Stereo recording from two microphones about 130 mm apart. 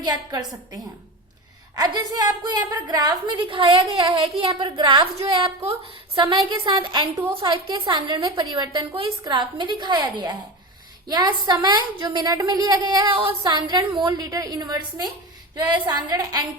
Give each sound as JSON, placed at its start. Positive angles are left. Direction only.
{"t": 0.0, "sound": "a woman's voice", "side_deg": -30}